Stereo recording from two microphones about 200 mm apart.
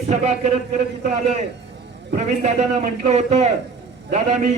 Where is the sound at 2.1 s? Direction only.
35° right (ahead or behind).